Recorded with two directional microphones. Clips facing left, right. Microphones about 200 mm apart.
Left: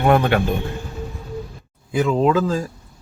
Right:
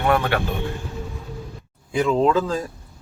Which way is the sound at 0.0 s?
25° left (ahead or behind).